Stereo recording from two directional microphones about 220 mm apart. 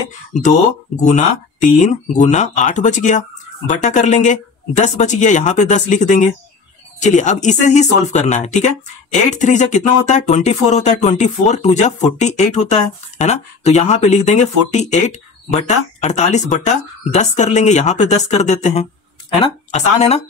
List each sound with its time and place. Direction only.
0.3 s a woman's voice: 35° left (ahead or behind)